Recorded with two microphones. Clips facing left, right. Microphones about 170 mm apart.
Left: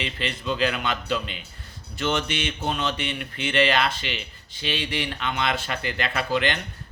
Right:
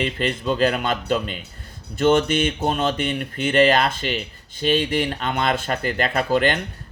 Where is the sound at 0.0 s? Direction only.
45° right (ahead or behind).